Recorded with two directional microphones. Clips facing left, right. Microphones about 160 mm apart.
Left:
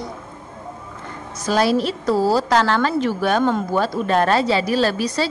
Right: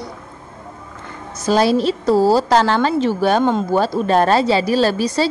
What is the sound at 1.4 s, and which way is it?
A woman's voice, 30° right (ahead or behind).